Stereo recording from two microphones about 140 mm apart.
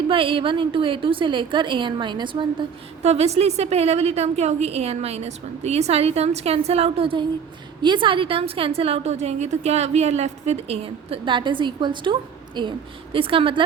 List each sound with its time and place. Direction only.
0.1 s a woman's voice: 40° right (ahead or behind)
3.0 s a woman's voice: 50° right (ahead or behind)